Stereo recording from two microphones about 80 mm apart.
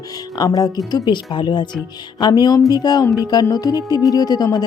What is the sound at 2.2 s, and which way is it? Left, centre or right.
Speech, left.